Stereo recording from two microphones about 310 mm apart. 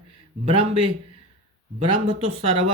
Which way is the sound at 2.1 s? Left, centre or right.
Centre.